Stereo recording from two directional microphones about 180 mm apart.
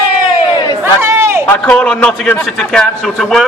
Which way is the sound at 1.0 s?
15° right (ahead or behind).